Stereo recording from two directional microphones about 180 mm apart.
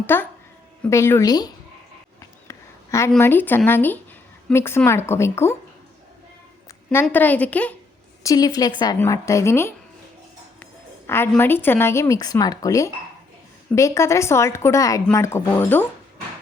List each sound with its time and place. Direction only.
0.0 s a woman's voice: 10° left (ahead or behind)
2.5 s a sound: 15° left (ahead or behind)
3.2 s a woman's voice: 10° left (ahead or behind)
7.0 s a woman's voice: 10° left (ahead or behind)
8.2 s a woman's voice: 20° left (ahead or behind)